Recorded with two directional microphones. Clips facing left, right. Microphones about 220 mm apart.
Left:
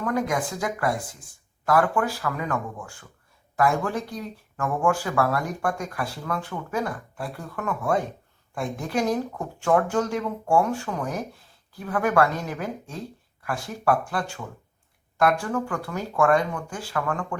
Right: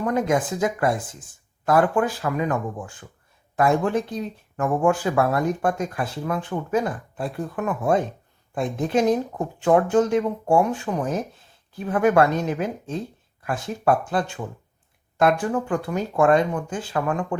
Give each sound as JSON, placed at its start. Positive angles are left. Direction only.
{"t": 0.0, "sound": "speech", "side_deg": -20}